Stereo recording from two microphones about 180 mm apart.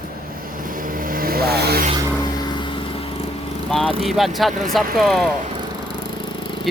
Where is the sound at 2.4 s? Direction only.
25° left (ahead or behind).